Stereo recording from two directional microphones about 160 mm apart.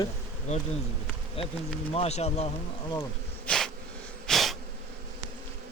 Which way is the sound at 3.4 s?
5° left (ahead or behind).